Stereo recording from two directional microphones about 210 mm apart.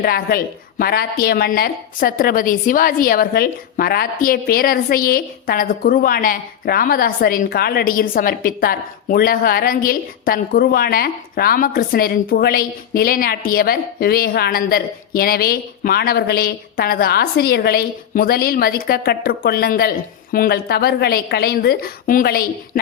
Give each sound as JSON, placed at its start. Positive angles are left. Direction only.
{"t": 0.0, "sound": "a woman's voice", "side_deg": 45}